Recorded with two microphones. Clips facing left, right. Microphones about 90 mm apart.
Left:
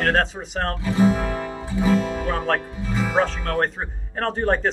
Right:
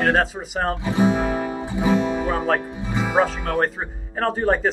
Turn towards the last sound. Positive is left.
turn(degrees=-5)  # may be behind; listen again after turning